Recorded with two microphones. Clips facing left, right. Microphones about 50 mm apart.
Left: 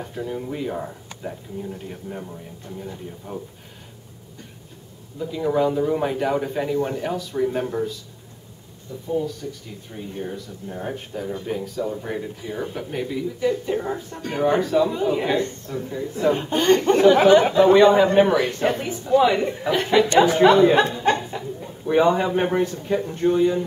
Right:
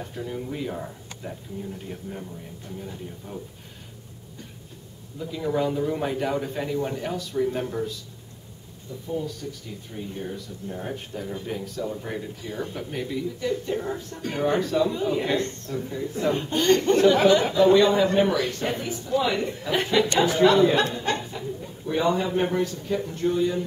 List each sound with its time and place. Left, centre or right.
0.0 s a man's voice: centre
3.3 s a man's voice: centre
5.2 s a man's voice: centre
9.2 s a man's voice: centre
16.3 s a man's voice: centre
20.4 s speech: left
21.0 s chuckle: left
21.5 s speech: left